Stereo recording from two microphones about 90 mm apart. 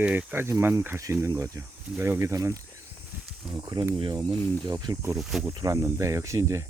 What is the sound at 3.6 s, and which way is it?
Speech, 50° right (ahead or behind).